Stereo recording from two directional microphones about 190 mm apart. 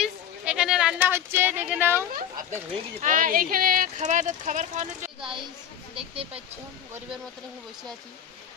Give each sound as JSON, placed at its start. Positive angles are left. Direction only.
{"t": 0.0, "sound": "a sound", "side_deg": -5}
{"t": 3.0, "sound": "speech", "side_deg": -45}
{"t": 5.2, "sound": "a woman's voice", "side_deg": -25}